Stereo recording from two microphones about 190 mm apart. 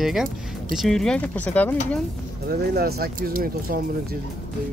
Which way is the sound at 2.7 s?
55° right (ahead or behind).